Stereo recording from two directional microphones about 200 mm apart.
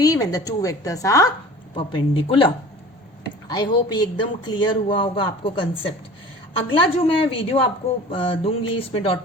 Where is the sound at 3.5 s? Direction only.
20° left (ahead or behind).